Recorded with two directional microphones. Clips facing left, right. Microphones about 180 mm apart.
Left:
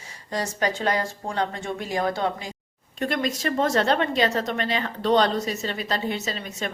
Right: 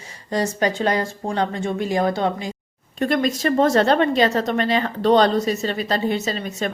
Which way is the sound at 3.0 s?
40° right (ahead or behind).